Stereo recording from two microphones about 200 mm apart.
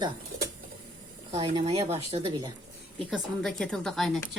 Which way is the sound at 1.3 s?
30° right (ahead or behind).